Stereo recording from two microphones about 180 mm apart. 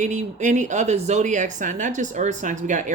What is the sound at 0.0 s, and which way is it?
Speech, 40° right (ahead or behind).